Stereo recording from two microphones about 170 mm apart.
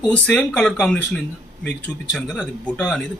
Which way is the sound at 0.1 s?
5° left (ahead or behind).